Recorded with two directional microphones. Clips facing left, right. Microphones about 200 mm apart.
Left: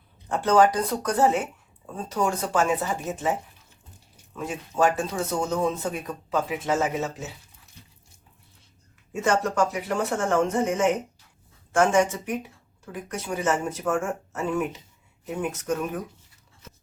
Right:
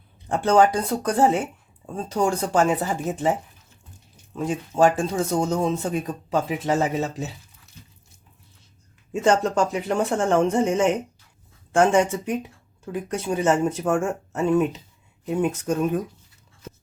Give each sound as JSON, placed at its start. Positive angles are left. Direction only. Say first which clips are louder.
{"t": 0.3, "sound": "speech", "louder": "right 2 dB", "side_deg": -30}
{"t": 4.4, "sound": "speech", "louder": "right 4 dB", "side_deg": -30}
{"t": 9.2, "sound": "speech", "louder": "right 3 dB", "side_deg": -30}